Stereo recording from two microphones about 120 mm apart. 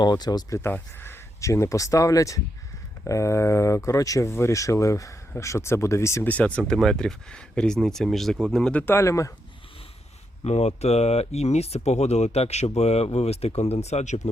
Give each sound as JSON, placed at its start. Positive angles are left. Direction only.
{"t": 0.0, "sound": "speech", "side_deg": 35}
{"t": 0.6, "sound": "speech", "side_deg": 15}
{"t": 6.3, "sound": "speech", "side_deg": 10}
{"t": 8.8, "sound": "speech", "side_deg": 20}
{"t": 10.4, "sound": "speech", "side_deg": 65}